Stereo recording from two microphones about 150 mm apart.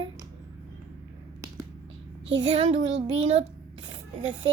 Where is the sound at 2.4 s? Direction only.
40° right (ahead or behind).